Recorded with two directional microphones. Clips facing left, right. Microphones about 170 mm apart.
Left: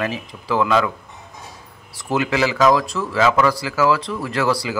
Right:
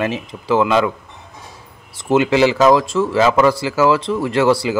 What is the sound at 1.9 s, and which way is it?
Speech, 25° right (ahead or behind).